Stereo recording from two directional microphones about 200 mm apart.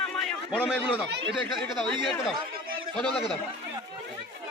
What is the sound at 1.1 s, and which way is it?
Speech, 65° right (ahead or behind).